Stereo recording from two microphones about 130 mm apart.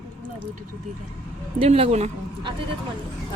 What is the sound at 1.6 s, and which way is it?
Speech, 45° right (ahead or behind).